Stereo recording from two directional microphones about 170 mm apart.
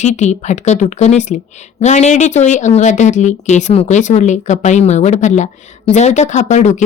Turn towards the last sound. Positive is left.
turn(degrees=45)  # may be behind; listen again after turning